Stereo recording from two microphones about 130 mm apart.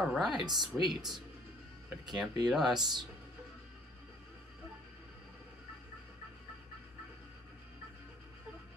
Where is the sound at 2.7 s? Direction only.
35° right (ahead or behind).